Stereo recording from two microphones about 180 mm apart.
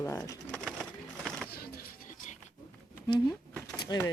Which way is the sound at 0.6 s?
5° left (ahead or behind).